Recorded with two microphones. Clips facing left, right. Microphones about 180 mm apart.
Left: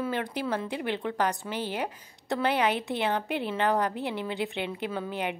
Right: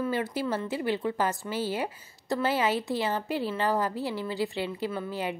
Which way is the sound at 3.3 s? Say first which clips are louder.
Right 1 dB; 20° left (ahead or behind).